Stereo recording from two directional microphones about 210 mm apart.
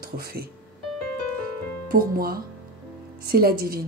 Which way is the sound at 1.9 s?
45° right (ahead or behind).